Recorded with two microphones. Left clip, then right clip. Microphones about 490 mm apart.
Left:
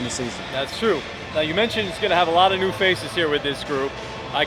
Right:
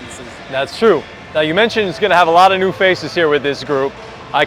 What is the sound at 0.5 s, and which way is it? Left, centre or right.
Speech, right.